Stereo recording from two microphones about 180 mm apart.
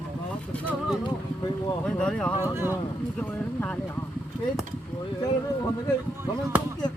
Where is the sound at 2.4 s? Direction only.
10° right (ahead or behind).